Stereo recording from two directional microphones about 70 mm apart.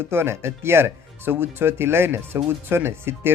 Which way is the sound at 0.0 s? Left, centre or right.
Right.